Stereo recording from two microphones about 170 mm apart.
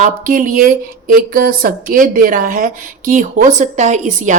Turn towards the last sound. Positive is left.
turn(degrees=-45)  # may be behind; listen again after turning